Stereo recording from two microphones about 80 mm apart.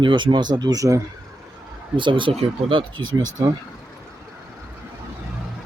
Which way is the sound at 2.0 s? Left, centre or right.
Right.